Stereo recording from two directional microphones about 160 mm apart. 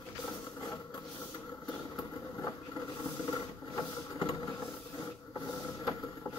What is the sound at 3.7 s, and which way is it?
Vehicle, 30° left (ahead or behind).